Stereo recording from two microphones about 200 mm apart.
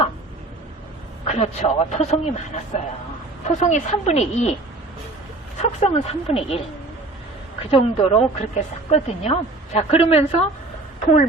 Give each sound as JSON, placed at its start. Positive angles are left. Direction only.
{"t": 1.3, "sound": "a man's voice", "side_deg": 35}
{"t": 5.8, "sound": "speech", "side_deg": 30}
{"t": 7.7, "sound": "speech", "side_deg": 30}